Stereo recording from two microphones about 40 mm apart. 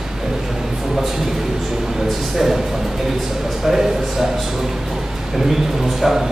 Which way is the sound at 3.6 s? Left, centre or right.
Centre.